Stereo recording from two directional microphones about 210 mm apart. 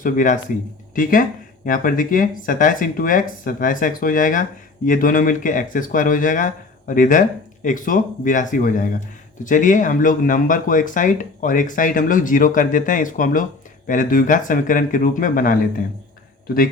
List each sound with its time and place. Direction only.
0.0 s speech: 40° left (ahead or behind)